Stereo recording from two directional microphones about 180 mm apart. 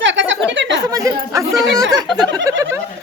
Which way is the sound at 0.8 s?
20° right (ahead or behind).